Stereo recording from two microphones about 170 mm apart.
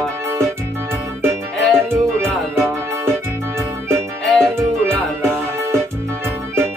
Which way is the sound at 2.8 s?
15° right (ahead or behind).